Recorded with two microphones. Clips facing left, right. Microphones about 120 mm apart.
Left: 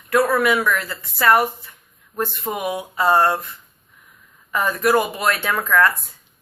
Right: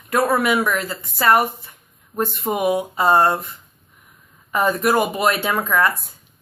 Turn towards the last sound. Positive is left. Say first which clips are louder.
# left 1 dB
turn(degrees=-15)  # may be behind; listen again after turning